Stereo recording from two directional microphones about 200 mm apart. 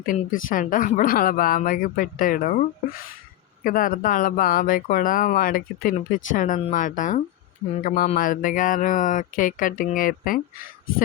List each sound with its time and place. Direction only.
0.0 s a woman's voice: 45° left (ahead or behind)